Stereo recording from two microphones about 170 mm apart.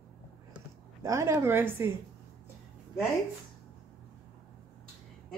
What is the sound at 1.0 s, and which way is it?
Speech, 15° right (ahead or behind).